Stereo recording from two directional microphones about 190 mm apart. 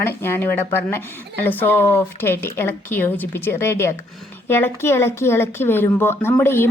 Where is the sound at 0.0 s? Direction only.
10° left (ahead or behind).